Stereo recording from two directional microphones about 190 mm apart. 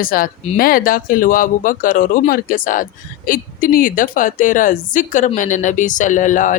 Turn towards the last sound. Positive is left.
turn(degrees=40)  # may be behind; listen again after turning